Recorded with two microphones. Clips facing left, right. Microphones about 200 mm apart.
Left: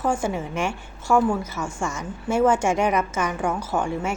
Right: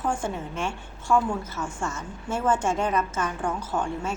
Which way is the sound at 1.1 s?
75° left (ahead or behind).